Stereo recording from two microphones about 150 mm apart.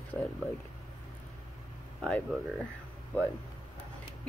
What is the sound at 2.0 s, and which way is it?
Speech, 5° left (ahead or behind).